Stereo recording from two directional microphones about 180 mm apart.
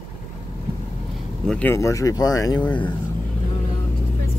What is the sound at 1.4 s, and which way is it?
Speech, 10° left (ahead or behind).